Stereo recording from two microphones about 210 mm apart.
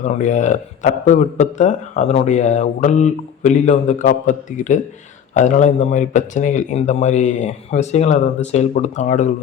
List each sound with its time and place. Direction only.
0.0 s a man's voice: 35° left (ahead or behind)